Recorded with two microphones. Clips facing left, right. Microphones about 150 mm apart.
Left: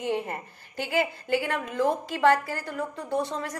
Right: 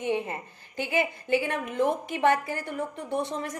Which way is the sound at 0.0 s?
20° right (ahead or behind).